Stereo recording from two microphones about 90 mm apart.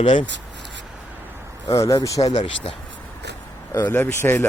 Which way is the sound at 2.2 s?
60° left (ahead or behind).